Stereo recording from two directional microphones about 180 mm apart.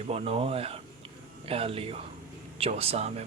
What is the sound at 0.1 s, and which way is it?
Speech, 35° right (ahead or behind).